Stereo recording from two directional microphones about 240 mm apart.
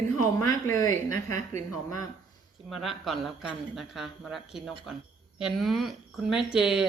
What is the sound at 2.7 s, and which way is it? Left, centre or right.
Speech, centre.